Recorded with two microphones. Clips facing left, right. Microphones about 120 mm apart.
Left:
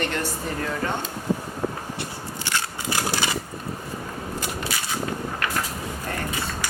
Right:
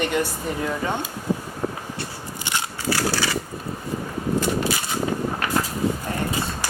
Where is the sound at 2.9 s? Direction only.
20° left (ahead or behind).